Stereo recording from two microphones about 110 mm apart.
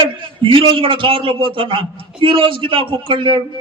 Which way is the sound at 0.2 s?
50° right (ahead or behind).